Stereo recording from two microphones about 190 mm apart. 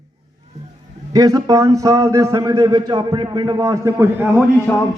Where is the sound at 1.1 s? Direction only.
20° right (ahead or behind).